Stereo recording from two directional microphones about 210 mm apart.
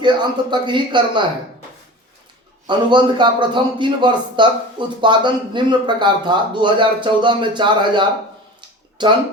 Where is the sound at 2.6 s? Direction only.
20° right (ahead or behind).